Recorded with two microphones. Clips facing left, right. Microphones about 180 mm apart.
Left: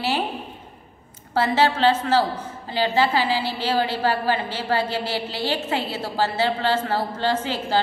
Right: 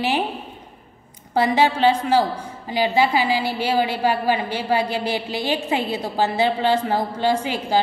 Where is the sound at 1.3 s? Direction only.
15° right (ahead or behind).